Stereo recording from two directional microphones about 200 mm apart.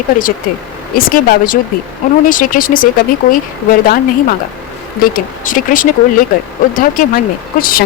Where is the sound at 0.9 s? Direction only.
45° left (ahead or behind).